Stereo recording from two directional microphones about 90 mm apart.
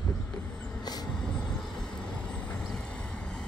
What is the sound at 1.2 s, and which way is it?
Vehicle, 10° left (ahead or behind).